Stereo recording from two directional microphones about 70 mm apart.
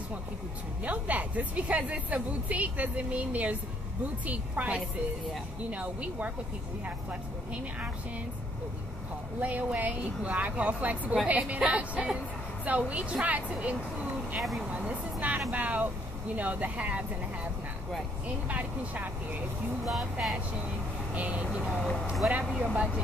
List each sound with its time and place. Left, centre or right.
0.8 s a woman's voice: right
9.4 s a woman's voice: right
18.5 s a woman's voice: right
19.8 s speech: centre
21.1 s speech: centre
21.5 s speech: centre
22.2 s a woman's voice: centre